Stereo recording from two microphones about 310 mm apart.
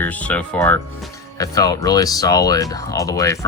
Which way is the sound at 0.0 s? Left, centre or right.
Centre.